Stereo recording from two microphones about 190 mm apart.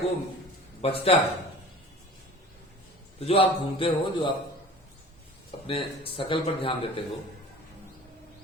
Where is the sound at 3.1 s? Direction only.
30° left (ahead or behind).